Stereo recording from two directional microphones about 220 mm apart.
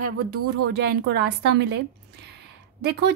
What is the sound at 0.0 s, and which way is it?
Speech, 90° right.